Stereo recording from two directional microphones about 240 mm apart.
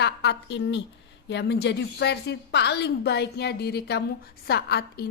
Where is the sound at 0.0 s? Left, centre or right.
Left.